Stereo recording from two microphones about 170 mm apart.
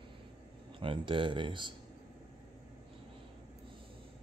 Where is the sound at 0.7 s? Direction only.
30° right (ahead or behind).